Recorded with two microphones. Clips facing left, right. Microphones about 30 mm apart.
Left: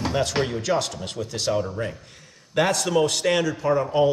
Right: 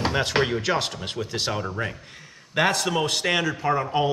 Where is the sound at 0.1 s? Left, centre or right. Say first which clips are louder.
Right 1 dB; right.